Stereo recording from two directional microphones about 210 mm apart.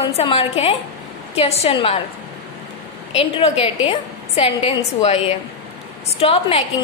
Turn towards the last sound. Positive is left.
turn(degrees=30)  # may be behind; listen again after turning